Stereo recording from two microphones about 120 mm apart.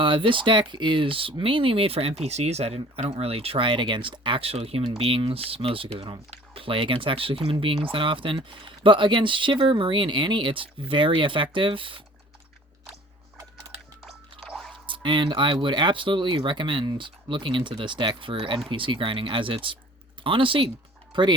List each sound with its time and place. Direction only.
0.0 s speech: 45° right (ahead or behind)
14.0 s music: centre (ahead or behind)
14.8 s speech: 40° right (ahead or behind)